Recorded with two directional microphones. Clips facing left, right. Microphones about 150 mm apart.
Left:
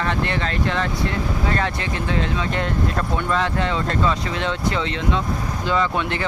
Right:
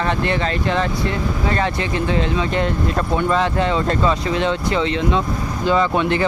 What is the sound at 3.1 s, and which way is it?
Speech, 25° right (ahead or behind).